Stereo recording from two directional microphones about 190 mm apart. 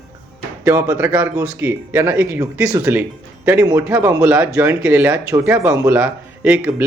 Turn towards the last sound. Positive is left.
turn(degrees=-5)  # may be behind; listen again after turning